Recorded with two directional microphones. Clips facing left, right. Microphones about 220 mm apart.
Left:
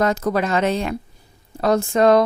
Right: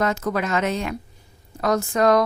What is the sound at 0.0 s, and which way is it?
A woman's voice, 35° left (ahead or behind).